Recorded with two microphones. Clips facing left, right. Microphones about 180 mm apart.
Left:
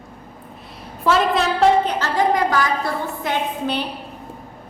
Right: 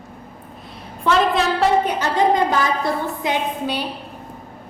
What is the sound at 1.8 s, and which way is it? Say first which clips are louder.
A woman's voice: right 1 dB; 20° right (ahead or behind).